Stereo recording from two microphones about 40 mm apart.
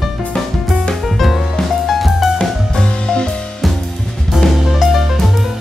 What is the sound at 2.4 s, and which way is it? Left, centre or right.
Music, centre.